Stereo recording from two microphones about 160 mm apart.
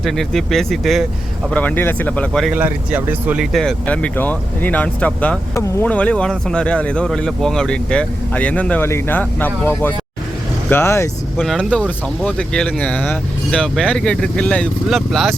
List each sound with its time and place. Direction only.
0.0 s speech: centre (ahead or behind)
2.6 s speech: 10° right (ahead or behind)
3.5 s speech: 5° left (ahead or behind)
11.3 s speech: 5° left (ahead or behind)